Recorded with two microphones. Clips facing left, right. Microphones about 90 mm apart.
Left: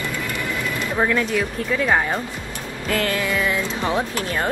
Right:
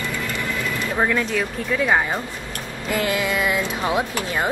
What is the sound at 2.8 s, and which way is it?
Speech, 15° right (ahead or behind).